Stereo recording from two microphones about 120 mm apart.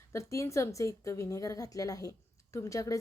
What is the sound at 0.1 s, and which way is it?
A woman's voice, 25° left (ahead or behind).